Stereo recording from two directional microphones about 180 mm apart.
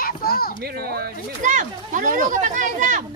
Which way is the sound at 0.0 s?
55° left (ahead or behind).